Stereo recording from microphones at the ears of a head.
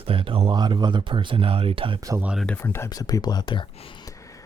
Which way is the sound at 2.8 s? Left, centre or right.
Left.